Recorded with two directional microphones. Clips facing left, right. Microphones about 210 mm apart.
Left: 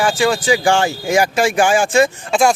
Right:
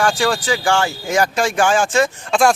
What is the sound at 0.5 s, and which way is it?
Speech, 15° left (ahead or behind).